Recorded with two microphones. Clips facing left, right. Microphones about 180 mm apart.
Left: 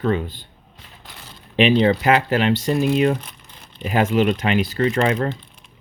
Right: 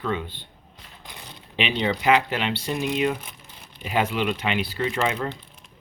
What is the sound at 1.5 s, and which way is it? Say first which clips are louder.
Speech: left 9 dB; 45° left (ahead or behind).